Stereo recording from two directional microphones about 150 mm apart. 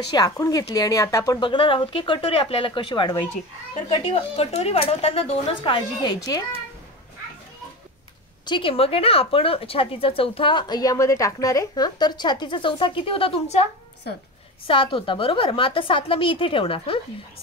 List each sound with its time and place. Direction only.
0.1 s speech: 25° left (ahead or behind)
8.5 s speech: 35° left (ahead or behind)
14.7 s speech: 35° left (ahead or behind)